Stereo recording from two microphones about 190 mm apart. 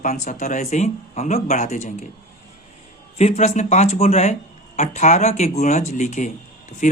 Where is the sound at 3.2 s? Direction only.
35° left (ahead or behind).